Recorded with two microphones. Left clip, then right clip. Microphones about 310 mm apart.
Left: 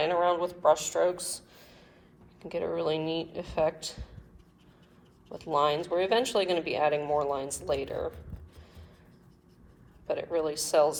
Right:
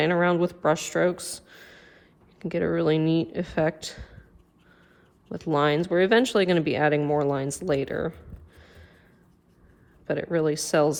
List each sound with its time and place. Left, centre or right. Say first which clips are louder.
0.0 s a man's voice: right 3 dB; right
5.4 s speech: right 3 dB; right
10.3 s speech: right 2 dB; right